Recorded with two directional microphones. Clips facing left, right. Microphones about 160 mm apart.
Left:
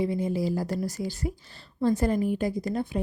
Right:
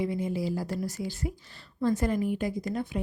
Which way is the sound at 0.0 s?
30° left (ahead or behind).